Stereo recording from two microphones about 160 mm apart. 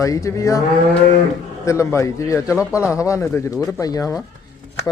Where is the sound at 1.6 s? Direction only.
20° left (ahead or behind).